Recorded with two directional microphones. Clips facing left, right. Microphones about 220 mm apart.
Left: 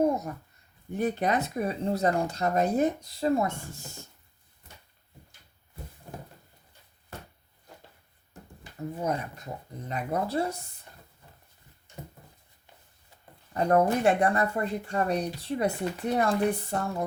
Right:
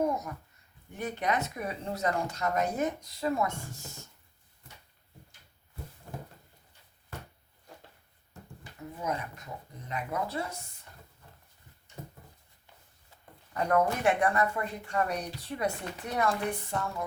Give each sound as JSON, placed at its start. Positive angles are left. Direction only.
{"t": 0.0, "sound": "a sound", "side_deg": 30}
{"t": 0.9, "sound": "speech", "side_deg": 35}
{"t": 9.0, "sound": "speech", "side_deg": 35}
{"t": 13.5, "sound": "speech", "side_deg": 30}